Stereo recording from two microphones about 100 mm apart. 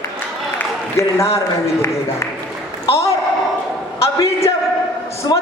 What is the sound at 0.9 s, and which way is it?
Speech, 30° left (ahead or behind).